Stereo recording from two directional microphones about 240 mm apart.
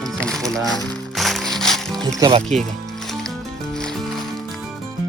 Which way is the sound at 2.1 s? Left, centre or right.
Centre.